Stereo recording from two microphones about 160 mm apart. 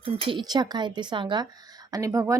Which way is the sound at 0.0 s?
35° right (ahead or behind).